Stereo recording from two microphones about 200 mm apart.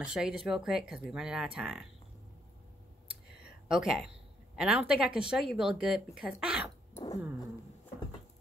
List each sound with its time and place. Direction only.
0.0 s speech: 5° right (ahead or behind)
3.4 s a sound: 5° right (ahead or behind)
4.6 s speech: 5° right (ahead or behind)
6.9 s cat: 15° left (ahead or behind)